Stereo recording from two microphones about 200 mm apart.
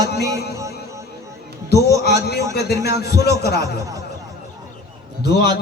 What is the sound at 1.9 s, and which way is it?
Speech, 55° left (ahead or behind).